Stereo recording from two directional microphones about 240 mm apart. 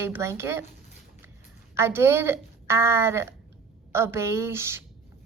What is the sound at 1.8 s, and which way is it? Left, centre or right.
A woman's voice, centre.